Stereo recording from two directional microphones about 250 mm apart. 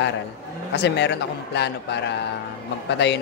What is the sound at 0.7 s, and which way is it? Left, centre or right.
Speech, left.